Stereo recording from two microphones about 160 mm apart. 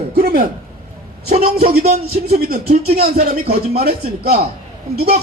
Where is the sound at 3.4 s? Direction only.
40° right (ahead or behind).